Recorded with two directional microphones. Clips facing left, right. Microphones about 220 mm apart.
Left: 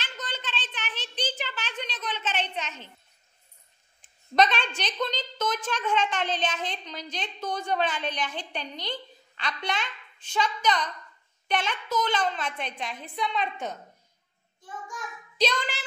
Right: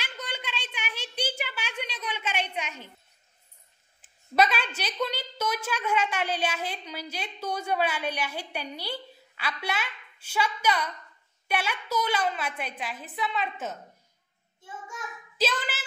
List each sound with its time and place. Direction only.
0.0 s a sound: 10° right (ahead or behind)
4.0 s a woman's voice: 5° right (ahead or behind)
14.6 s child singing: 25° right (ahead or behind)
15.3 s speech: 5° right (ahead or behind)